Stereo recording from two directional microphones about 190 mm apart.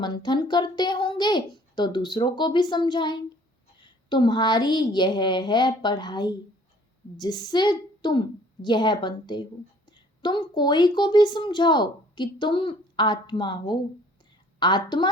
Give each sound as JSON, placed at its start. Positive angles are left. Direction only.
{"t": 0.0, "sound": "a woman's voice", "side_deg": 20}